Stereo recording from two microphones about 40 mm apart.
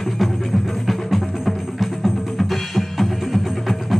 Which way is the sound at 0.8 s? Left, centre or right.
Centre.